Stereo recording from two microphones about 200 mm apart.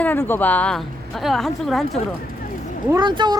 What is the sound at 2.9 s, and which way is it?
Speech, 20° right (ahead or behind).